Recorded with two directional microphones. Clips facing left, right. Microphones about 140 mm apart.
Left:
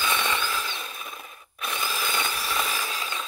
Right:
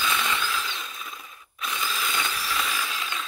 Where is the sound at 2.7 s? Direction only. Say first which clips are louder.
Even; 35° left (ahead or behind).